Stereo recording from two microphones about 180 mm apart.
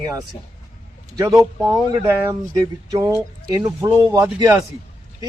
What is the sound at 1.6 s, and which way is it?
Speech, 20° right (ahead or behind).